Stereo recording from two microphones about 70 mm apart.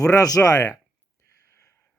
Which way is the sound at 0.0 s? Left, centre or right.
Left.